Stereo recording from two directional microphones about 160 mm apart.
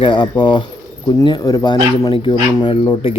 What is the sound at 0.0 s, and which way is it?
Speech, 30° left (ahead or behind).